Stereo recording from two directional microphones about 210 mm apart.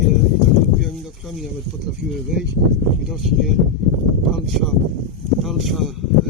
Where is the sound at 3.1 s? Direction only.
Centre (ahead or behind).